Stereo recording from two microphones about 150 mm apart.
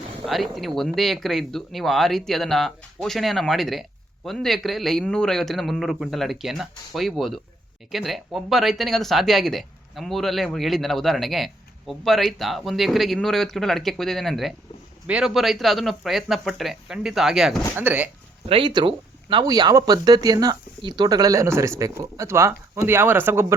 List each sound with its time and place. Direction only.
0.3 s speech: centre (ahead or behind)
18.4 s speech: 35° right (ahead or behind); by 23.6 s 15° right (ahead or behind)